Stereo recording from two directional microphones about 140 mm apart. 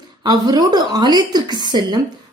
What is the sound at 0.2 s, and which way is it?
A woman's voice, 30° right (ahead or behind).